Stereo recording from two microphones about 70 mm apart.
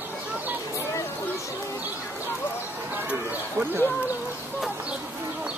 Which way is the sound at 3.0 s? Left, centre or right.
Right.